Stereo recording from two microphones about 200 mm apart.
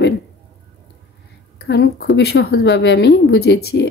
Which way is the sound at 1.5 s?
55° left (ahead or behind).